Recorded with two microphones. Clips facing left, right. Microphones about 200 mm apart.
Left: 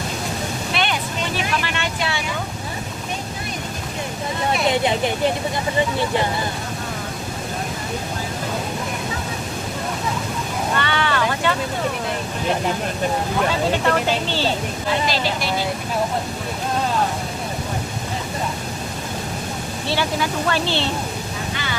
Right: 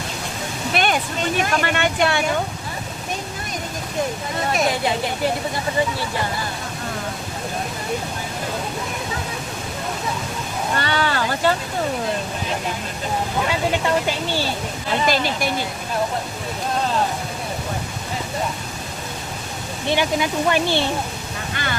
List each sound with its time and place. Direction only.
0.7 s a sound: 45° right (ahead or behind)
1.4 s speech: 50° right (ahead or behind)
4.7 s speech: 20° left (ahead or behind)
10.8 s boat: 40° right (ahead or behind)
13.8 s speech: 10° right (ahead or behind)
15.0 s speech: 50° right (ahead or behind)
19.9 s speech: 15° right (ahead or behind)